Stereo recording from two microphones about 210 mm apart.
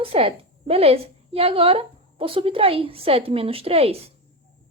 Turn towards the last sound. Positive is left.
turn(degrees=-30)  # may be behind; listen again after turning